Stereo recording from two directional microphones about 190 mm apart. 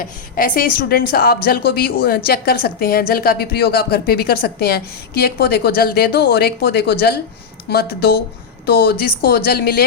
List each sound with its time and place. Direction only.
0.0 s a woman's voice: 45° left (ahead or behind)